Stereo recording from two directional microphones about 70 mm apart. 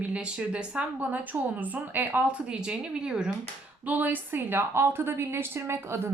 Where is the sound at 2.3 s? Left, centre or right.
Centre.